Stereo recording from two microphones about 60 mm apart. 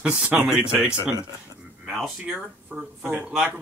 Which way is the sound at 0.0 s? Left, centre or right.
Centre.